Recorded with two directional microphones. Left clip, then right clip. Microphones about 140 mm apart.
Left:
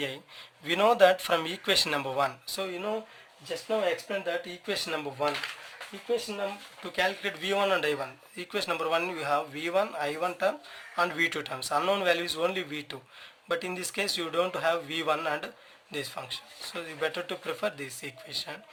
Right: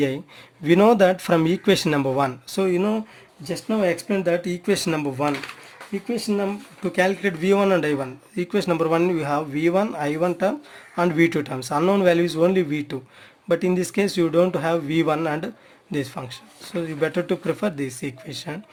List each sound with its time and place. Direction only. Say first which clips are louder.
0.6 s speech: right 6 dB; 40° right (ahead or behind)
3.7 s speech: right 6 dB; 80° right
6.9 s speech: right 7 dB; 45° right (ahead or behind)